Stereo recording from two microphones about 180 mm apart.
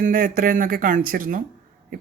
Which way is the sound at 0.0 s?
50° right (ahead or behind).